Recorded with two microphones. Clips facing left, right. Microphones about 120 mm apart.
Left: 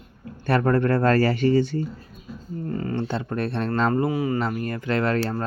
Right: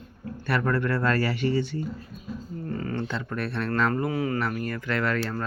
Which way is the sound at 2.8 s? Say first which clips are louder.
Left 5 dB; 25° left (ahead or behind).